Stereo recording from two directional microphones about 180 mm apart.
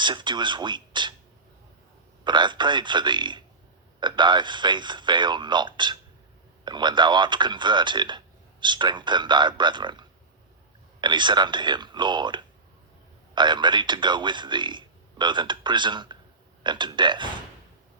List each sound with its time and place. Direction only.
0.0 s a man's voice: 25° right (ahead or behind)
2.2 s a man's voice: 25° right (ahead or behind)